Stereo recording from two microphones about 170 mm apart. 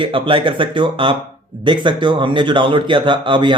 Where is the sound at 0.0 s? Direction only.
30° right (ahead or behind).